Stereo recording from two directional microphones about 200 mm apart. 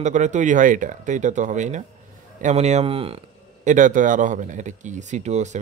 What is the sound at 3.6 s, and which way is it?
Speech, 40° right (ahead or behind).